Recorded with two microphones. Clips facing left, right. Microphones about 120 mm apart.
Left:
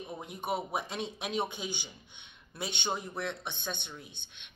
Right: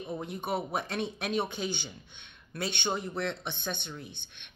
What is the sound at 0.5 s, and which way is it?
Speech, 20° left (ahead or behind).